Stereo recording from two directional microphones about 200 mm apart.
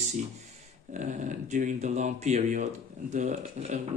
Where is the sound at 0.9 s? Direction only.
40° right (ahead or behind).